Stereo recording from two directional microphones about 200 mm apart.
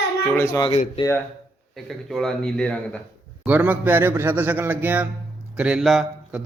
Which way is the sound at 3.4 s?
5° right (ahead or behind).